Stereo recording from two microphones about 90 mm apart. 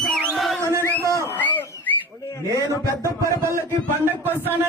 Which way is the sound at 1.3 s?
20° left (ahead or behind).